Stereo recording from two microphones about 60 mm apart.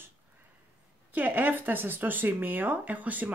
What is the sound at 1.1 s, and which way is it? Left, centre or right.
Speech, right.